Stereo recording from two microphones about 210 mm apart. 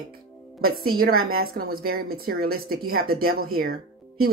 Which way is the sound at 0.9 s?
45° right (ahead or behind).